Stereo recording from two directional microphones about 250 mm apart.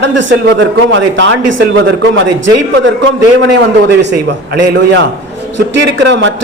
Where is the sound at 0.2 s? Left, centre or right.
Right.